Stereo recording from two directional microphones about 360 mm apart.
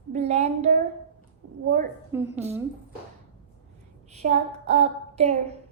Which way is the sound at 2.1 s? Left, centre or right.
Centre.